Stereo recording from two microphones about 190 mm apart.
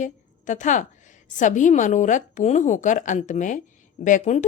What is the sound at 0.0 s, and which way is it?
A woman's voice, 40° left (ahead or behind).